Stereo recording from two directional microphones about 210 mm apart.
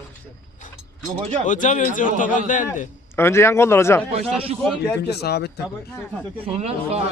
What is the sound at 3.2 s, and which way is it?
Speech, 10° left (ahead or behind).